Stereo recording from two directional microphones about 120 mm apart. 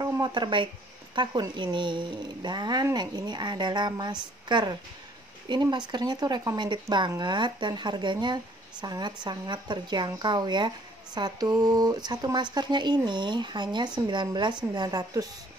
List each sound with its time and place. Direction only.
0.0 s speech: 35° right (ahead or behind)